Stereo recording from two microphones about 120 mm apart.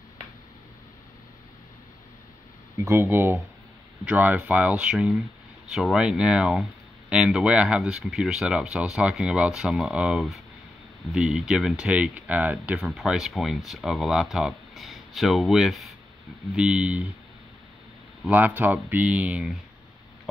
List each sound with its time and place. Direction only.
2.9 s speech: 20° right (ahead or behind)
18.3 s speech: 15° right (ahead or behind)